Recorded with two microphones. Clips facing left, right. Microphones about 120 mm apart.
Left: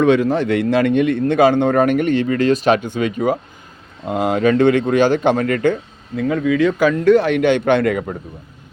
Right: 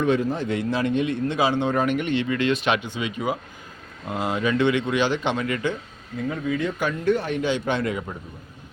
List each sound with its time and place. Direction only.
0.0 s a man's voice: 85° left; by 5.7 s 50° left (ahead or behind)
6.1 s speech: 90° left; by 8.1 s 60° left (ahead or behind)